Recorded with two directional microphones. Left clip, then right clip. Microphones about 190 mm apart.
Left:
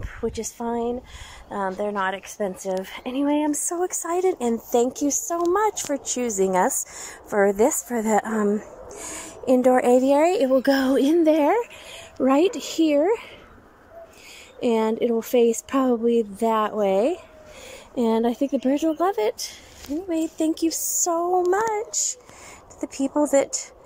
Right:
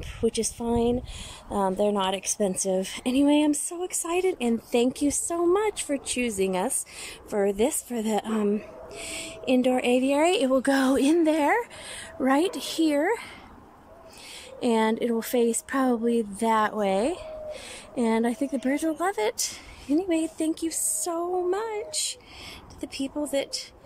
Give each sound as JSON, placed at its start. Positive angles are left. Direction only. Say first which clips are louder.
{"t": 0.2, "sound": "a woman's voice", "louder": "right 1 dB", "side_deg": -5}
{"t": 2.3, "sound": "speech", "louder": "even", "side_deg": -25}
{"t": 3.6, "sound": "a woman's voice", "louder": "left 6 dB", "side_deg": 0}
{"t": 14.6, "sound": "a woman's voice", "louder": "left 3 dB", "side_deg": 5}
{"t": 23.1, "sound": "speech", "louder": "left 9 dB", "side_deg": 5}